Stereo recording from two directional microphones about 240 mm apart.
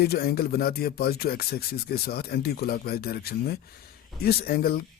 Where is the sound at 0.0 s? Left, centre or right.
Left.